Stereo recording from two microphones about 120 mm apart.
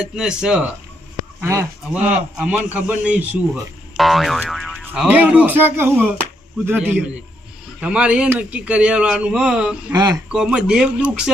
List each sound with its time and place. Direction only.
0.2 s speech: 5° right (ahead or behind)
1.4 s speech: 20° right (ahead or behind)
2.0 s a man's voice: 5° right (ahead or behind)
3.9 s boing: centre (ahead or behind)
5.0 s a man's voice: 15° right (ahead or behind)
9.9 s speech: 35° right (ahead or behind)
10.3 s speech: 5° right (ahead or behind)